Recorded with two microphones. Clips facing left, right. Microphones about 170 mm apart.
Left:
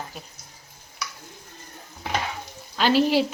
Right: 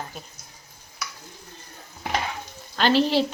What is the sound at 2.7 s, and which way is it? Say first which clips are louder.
Speech: even; 10° left (ahead or behind).